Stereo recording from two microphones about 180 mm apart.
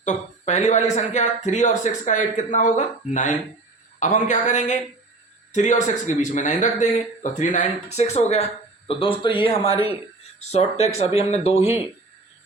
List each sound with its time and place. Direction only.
0.0 s speech: 40° left (ahead or behind)